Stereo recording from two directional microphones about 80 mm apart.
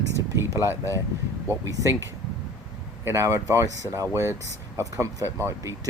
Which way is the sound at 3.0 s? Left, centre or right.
Right.